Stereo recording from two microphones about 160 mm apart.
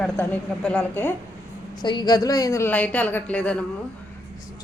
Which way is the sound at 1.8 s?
30° left (ahead or behind).